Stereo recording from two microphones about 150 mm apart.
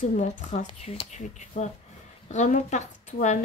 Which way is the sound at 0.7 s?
40° left (ahead or behind).